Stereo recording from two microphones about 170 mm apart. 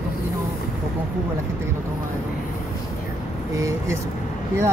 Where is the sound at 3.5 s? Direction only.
20° right (ahead or behind).